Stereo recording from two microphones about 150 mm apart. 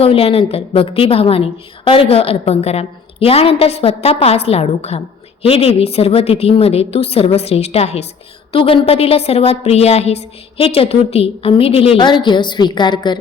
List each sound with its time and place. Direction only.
0.0 s a woman's voice: 40° left (ahead or behind)